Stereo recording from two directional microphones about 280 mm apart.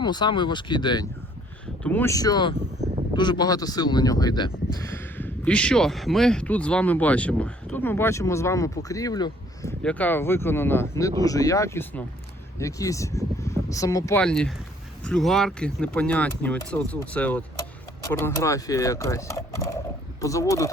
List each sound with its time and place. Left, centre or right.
0.0 s speech: centre